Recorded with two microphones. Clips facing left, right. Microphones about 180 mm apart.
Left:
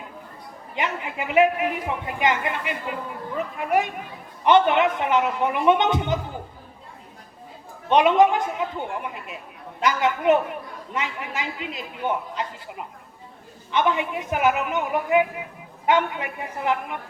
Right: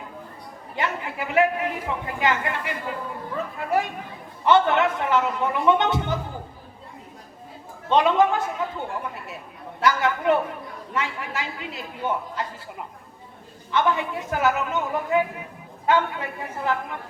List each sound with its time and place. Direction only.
0.8 s a man's voice: 20° left (ahead or behind)
7.9 s a man's voice: 20° left (ahead or behind)